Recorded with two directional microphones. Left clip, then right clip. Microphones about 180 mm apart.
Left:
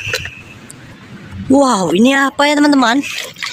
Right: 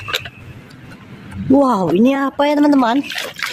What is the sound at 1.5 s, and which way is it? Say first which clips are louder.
Speech: left 2 dB; 5° right (ahead or behind).